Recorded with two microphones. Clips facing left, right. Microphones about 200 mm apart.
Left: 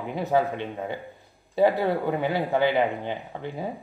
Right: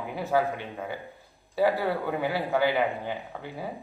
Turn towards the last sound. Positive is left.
turn(degrees=20)  # may be behind; listen again after turning